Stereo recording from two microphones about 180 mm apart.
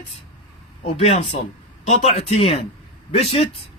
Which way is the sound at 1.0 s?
35° left (ahead or behind).